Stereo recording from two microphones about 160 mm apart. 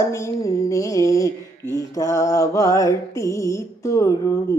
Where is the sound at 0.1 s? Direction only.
20° left (ahead or behind).